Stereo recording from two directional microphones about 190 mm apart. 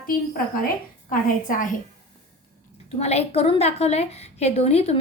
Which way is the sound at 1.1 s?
45° left (ahead or behind).